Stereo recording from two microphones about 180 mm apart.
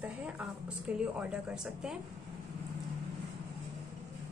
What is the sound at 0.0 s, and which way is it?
A woman's voice, 5° right (ahead or behind).